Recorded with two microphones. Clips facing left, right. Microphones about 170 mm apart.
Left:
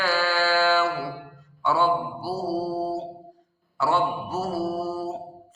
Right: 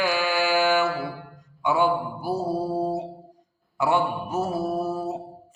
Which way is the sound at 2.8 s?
15° right (ahead or behind).